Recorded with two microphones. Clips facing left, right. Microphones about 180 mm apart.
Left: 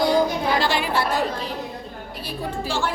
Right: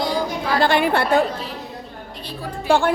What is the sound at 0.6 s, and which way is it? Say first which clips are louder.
Speech: right 4 dB; 55° right (ahead or behind).